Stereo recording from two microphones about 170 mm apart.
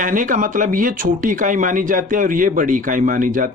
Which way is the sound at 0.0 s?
50° right (ahead or behind).